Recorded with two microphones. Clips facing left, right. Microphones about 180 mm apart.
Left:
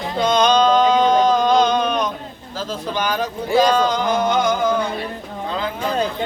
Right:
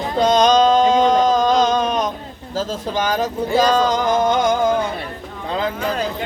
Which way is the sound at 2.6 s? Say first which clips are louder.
Right 2 dB; 45° right (ahead or behind).